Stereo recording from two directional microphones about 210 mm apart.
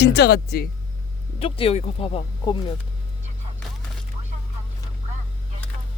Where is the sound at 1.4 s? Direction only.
25° left (ahead or behind).